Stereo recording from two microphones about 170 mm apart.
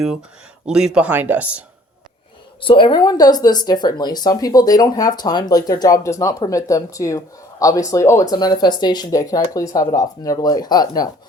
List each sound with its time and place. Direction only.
0.7 s speech: 5° right (ahead or behind)
2.6 s speech: 30° left (ahead or behind)